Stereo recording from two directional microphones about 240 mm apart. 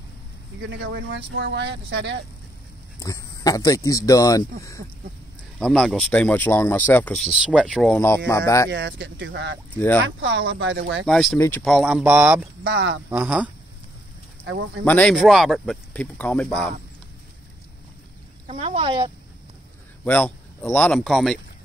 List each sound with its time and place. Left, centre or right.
0.7 s speech: right
3.0 s speech: centre
5.6 s speech: centre
8.6 s speech: right
9.8 s speech: centre
10.0 s speech: right
11.1 s speech: centre
12.6 s speech: right
13.1 s speech: centre
14.9 s speech: centre
18.5 s speech: right
20.1 s speech: centre